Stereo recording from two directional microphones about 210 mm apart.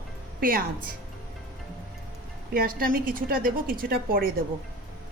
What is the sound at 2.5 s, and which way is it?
A woman's voice, 45° right (ahead or behind).